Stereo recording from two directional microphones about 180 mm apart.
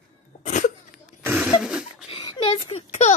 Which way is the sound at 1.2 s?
10° right (ahead or behind).